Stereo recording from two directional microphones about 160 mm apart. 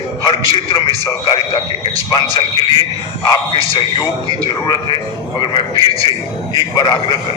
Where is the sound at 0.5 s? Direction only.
30° left (ahead or behind).